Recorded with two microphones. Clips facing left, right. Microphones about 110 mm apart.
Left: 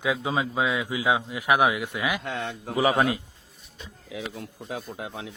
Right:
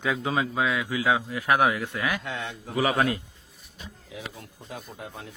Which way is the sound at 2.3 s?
45° left (ahead or behind).